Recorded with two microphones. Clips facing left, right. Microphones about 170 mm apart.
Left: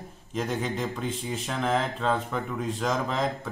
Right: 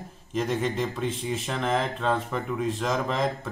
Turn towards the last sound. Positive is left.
turn(degrees=0)  # may be behind; listen again after turning